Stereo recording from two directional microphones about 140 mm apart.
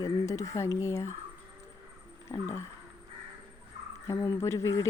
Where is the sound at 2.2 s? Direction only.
20° left (ahead or behind).